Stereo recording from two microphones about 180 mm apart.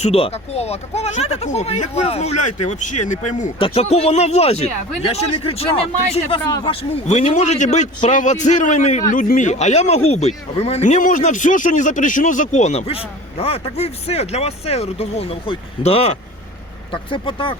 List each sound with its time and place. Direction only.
0.0 s speech: 35° left (ahead or behind)